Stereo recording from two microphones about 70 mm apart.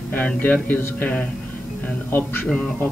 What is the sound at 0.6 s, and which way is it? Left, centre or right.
Speech, left.